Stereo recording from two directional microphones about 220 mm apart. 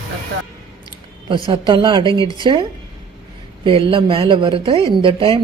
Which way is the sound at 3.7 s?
25° right (ahead or behind).